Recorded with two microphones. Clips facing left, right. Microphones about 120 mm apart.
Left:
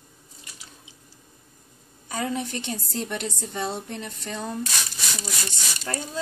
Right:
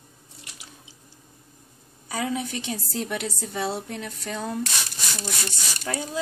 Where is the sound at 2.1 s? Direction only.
5° right (ahead or behind).